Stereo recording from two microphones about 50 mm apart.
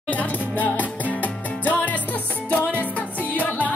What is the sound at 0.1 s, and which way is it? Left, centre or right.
Music, left.